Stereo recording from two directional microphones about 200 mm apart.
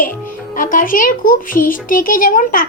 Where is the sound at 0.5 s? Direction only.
40° left (ahead or behind).